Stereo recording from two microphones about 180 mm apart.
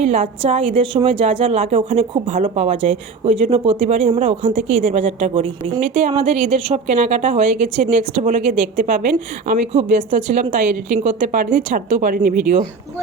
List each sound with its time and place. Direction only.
0.0 s a woman's voice: 35° right (ahead or behind)